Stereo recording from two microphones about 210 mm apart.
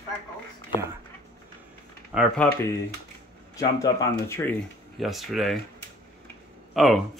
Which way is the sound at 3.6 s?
15° left (ahead or behind).